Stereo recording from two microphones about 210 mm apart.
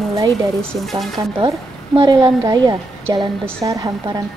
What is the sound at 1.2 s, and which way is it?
A woman's voice, 20° right (ahead or behind).